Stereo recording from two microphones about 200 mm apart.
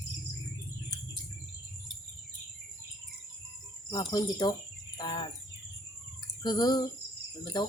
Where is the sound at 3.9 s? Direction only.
20° left (ahead or behind).